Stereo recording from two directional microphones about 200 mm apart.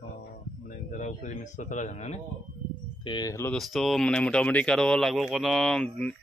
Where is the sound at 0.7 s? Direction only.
40° left (ahead or behind).